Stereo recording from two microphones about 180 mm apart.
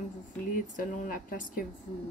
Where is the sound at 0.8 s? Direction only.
50° left (ahead or behind).